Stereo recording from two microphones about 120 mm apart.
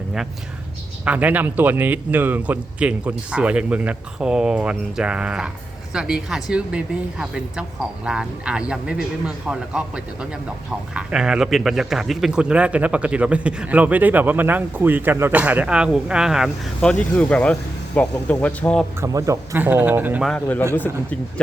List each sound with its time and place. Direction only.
1.0 s a man's voice: 10° right (ahead or behind)
16.8 s speech: 10° left (ahead or behind)
18.9 s speech: 25° right (ahead or behind)
19.5 s a man's voice: 15° right (ahead or behind)
20.7 s speech: 15° left (ahead or behind)